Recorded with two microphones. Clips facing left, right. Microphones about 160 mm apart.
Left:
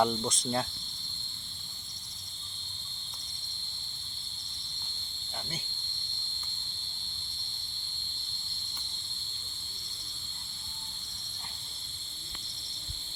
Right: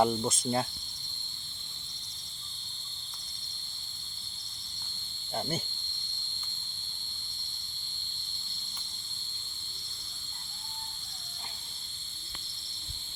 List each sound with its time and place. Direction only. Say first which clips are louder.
0.0 s cricket: right 2 dB; 10° right (ahead or behind)
5.3 s cricket: right 9 dB; 45° right (ahead or behind)